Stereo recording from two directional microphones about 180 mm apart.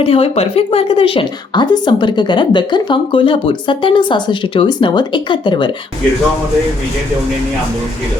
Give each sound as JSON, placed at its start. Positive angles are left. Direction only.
{"t": 0.0, "sound": "a woman's voice", "side_deg": 30}